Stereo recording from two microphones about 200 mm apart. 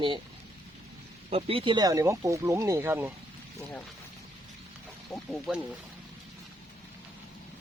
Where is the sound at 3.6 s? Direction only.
10° left (ahead or behind).